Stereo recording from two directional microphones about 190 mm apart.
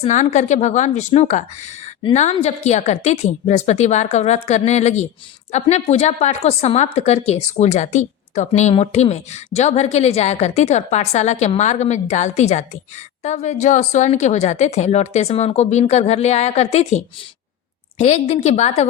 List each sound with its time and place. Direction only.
0.0 s speech: 40° left (ahead or behind)